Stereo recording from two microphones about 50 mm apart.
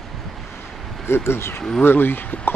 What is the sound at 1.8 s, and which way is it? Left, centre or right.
Speech, left.